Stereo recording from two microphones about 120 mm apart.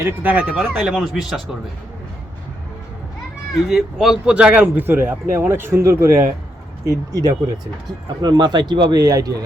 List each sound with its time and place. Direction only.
0.0 s speech: 15° right (ahead or behind)
3.5 s a man's voice: centre (ahead or behind); by 9.3 s 30° right (ahead or behind)